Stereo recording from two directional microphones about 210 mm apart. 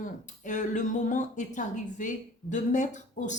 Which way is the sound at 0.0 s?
35° left (ahead or behind).